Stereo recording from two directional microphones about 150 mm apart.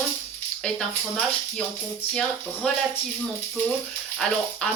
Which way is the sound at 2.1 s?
5° left (ahead or behind).